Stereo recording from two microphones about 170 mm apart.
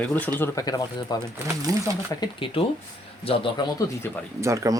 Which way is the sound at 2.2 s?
30° left (ahead or behind).